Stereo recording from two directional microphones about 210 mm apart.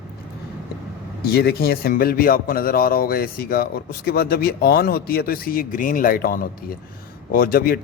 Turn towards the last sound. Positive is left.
turn(degrees=45)  # may be behind; listen again after turning